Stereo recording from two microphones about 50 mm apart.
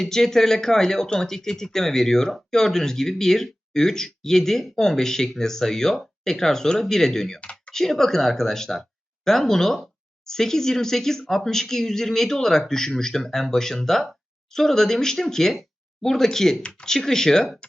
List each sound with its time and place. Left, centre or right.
0.0 s speech: centre